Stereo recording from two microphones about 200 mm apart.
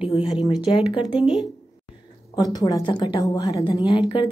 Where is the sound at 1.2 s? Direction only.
Centre (ahead or behind).